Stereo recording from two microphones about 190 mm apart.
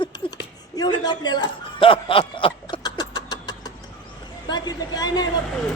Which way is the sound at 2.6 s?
20° left (ahead or behind).